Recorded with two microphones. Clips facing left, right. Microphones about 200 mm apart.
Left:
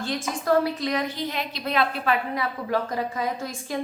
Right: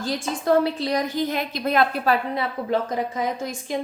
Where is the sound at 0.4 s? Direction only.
30° right (ahead or behind); by 2.1 s 45° right (ahead or behind).